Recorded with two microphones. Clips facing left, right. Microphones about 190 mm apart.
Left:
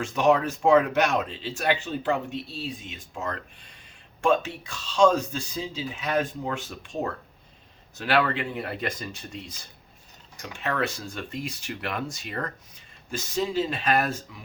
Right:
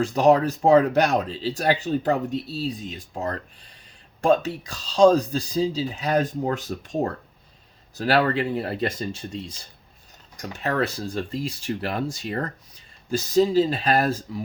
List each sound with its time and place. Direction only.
0.0 s speech: 35° right (ahead or behind)